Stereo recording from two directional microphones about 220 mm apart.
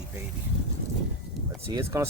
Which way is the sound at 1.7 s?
10° right (ahead or behind).